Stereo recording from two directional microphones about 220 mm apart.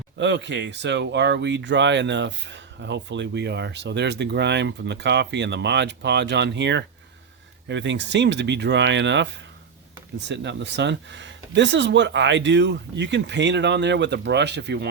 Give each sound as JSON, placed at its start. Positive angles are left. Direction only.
{"t": 0.2, "sound": "speech", "side_deg": -55}